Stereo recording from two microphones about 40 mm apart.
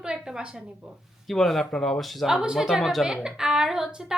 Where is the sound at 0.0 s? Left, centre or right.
Centre.